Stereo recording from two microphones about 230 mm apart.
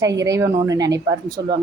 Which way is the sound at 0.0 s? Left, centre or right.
Centre.